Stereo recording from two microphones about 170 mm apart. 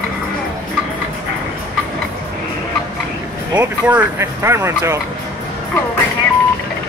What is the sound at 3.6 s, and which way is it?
Speech, 10° right (ahead or behind).